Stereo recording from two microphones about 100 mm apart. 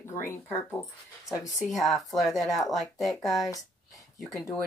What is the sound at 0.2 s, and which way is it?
Speech, 25° left (ahead or behind).